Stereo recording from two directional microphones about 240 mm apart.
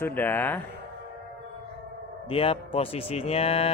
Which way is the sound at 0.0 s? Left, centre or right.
Centre.